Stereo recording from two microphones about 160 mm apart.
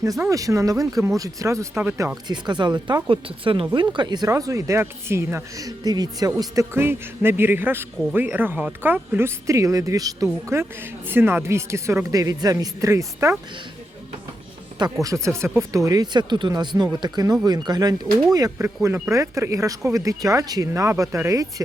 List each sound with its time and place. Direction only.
0.0 s speech: 20° right (ahead or behind)
2.2 s speech: 25° right (ahead or behind)
15.0 s speech: 20° right (ahead or behind)